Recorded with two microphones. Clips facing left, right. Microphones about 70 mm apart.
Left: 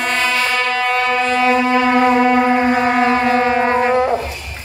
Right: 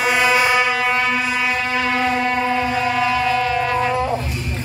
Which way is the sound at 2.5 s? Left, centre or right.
Left.